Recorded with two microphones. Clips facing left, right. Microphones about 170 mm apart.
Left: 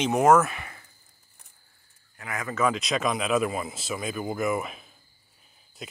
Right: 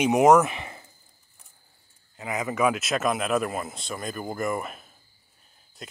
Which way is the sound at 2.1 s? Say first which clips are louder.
Right 3 dB; 20° right (ahead or behind).